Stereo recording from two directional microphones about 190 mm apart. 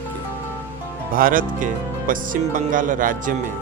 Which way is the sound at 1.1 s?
45° right (ahead or behind).